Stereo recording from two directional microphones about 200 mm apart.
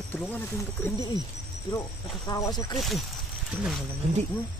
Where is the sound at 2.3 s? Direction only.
20° left (ahead or behind).